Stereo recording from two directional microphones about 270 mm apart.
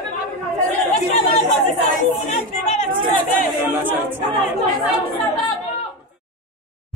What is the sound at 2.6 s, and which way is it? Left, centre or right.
Chatter, left.